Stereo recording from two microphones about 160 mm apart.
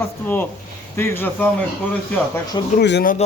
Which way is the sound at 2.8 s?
90° left.